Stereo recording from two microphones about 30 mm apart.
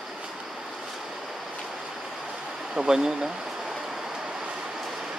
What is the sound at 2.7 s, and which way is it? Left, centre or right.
Speech, right.